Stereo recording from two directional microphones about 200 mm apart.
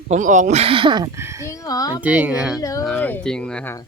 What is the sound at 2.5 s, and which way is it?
Speech, 15° left (ahead or behind).